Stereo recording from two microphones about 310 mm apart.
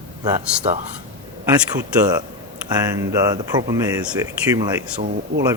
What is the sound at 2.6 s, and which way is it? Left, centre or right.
Speech, centre.